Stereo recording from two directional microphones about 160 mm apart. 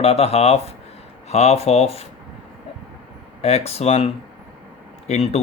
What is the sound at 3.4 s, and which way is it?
Speech, 40° left (ahead or behind).